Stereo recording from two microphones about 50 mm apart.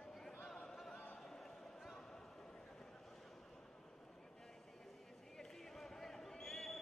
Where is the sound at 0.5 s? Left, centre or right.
Centre.